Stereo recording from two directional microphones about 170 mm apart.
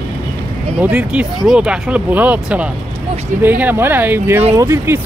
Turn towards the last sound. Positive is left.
turn(degrees=-15)  # may be behind; listen again after turning